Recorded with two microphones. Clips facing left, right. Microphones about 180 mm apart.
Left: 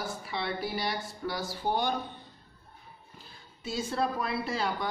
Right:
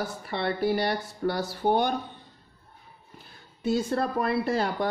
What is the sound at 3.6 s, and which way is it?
Speech, 55° right (ahead or behind).